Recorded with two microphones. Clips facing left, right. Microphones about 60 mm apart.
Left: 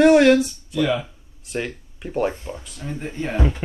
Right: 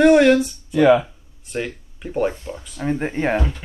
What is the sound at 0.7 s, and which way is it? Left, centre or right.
Speech, right.